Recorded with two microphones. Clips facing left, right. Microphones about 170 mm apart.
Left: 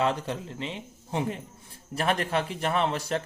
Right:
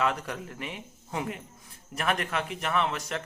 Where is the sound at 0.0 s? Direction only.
30° left (ahead or behind).